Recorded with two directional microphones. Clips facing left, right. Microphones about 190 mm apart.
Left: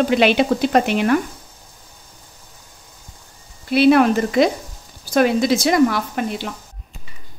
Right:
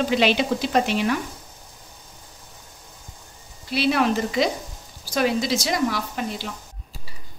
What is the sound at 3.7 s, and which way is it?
Speech, 55° left (ahead or behind).